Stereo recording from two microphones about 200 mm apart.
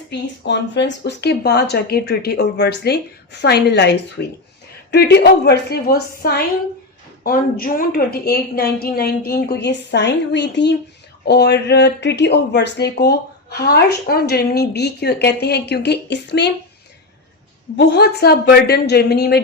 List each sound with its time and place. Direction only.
0.1 s a woman's voice: 60° left (ahead or behind)
17.7 s a woman's voice: 55° left (ahead or behind)